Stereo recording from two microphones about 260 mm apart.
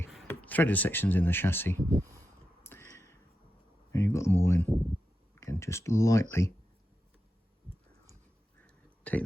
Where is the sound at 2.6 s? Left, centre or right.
Centre.